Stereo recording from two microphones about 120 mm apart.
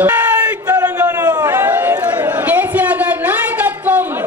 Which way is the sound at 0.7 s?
30° right (ahead or behind).